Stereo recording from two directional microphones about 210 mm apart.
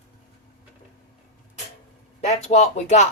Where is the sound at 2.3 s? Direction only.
30° left (ahead or behind).